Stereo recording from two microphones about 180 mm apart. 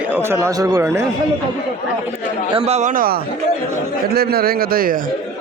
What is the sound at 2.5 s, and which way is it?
A man's voice, 35° right (ahead or behind).